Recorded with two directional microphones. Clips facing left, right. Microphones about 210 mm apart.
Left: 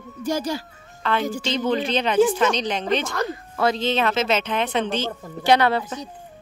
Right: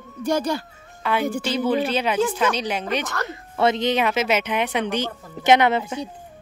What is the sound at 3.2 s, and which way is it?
Speech, 25° right (ahead or behind).